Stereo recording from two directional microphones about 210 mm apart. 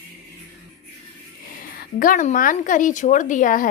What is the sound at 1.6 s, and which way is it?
A woman's voice, 40° left (ahead or behind).